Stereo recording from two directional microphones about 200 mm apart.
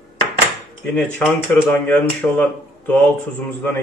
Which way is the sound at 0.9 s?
5° left (ahead or behind).